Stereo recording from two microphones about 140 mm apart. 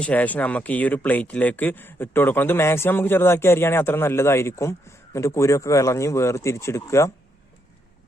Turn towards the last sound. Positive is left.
turn(degrees=20)  # may be behind; listen again after turning